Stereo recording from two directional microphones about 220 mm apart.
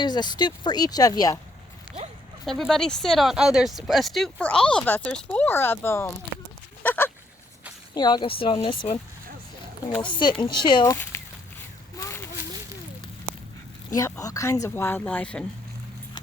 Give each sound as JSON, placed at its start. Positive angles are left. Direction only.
{"t": 0.0, "sound": "speech", "side_deg": 20}
{"t": 2.0, "sound": "horse", "side_deg": -30}
{"t": 2.4, "sound": "speech", "side_deg": 0}
{"t": 6.8, "sound": "a sound", "side_deg": 10}
{"t": 7.9, "sound": "speech", "side_deg": 20}
{"t": 10.1, "sound": "speech", "side_deg": 20}
{"t": 11.9, "sound": "a sound", "side_deg": 10}
{"t": 13.9, "sound": "speech", "side_deg": 15}